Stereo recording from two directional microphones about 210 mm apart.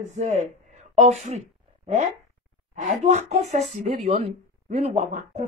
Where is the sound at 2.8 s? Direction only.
35° right (ahead or behind).